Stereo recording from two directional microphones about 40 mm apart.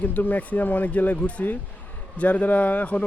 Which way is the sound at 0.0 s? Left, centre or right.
Left.